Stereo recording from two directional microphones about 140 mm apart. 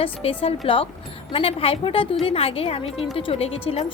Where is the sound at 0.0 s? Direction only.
40° left (ahead or behind).